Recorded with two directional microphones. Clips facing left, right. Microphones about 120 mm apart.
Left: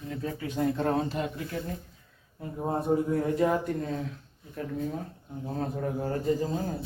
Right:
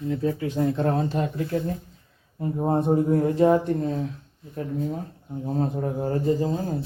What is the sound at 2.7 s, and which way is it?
Speech, 30° right (ahead or behind).